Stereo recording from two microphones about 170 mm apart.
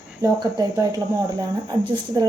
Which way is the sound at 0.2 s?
20° right (ahead or behind).